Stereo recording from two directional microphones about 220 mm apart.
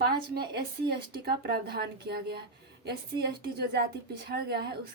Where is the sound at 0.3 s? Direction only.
45° right (ahead or behind).